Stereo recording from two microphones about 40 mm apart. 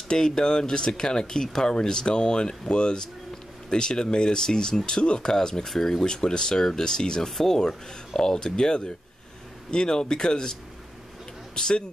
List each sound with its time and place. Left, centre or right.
0.1 s speech: centre
11.5 s speech: centre